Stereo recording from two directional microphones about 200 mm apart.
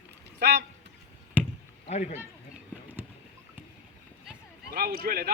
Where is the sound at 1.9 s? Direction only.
35° left (ahead or behind).